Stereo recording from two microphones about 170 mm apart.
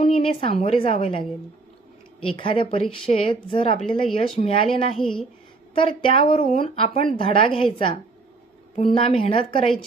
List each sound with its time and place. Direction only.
0.0 s speech: 30° left (ahead or behind)
2.2 s a woman's voice: 30° left (ahead or behind)